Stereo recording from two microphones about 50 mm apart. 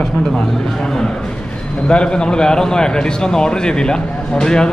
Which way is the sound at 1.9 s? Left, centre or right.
Centre.